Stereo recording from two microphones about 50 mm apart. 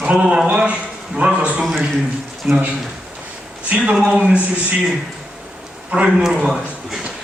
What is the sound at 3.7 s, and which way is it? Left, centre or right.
Speech, right.